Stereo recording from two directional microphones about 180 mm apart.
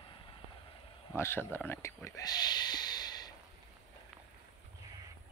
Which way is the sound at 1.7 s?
15° left (ahead or behind).